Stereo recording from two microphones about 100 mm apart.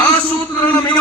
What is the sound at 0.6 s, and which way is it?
Speech, 15° left (ahead or behind).